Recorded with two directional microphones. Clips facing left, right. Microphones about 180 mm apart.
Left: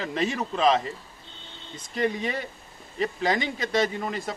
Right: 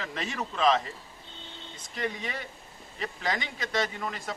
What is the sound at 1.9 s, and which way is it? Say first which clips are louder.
Speech: left 7 dB; 35° left (ahead or behind).